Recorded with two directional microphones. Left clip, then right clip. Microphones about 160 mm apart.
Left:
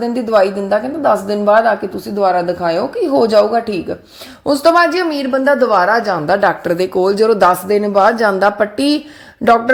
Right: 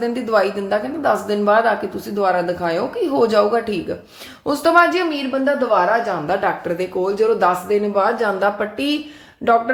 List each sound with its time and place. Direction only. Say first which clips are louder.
0.0 s a woman's voice: left 5 dB; 30° left (ahead or behind); by 5.0 s 45° left (ahead or behind)
5.1 s a woman's voice: left 6 dB; 90° left; by 9.7 s 60° left (ahead or behind)